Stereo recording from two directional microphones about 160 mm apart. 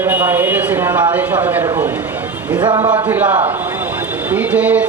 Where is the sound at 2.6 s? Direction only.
30° right (ahead or behind).